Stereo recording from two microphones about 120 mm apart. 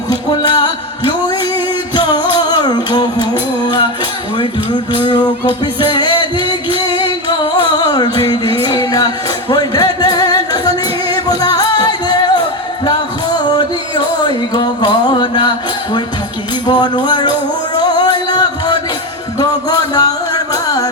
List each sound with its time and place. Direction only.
0.1 s music: 35° left (ahead or behind)
7.5 s music: 40° left (ahead or behind)